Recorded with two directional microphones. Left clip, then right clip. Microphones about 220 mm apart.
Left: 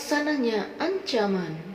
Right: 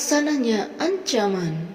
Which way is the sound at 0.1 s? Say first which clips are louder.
Right 3 dB; 35° right (ahead or behind).